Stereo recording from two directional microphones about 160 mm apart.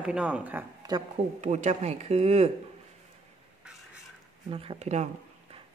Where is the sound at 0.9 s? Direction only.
25° right (ahead or behind).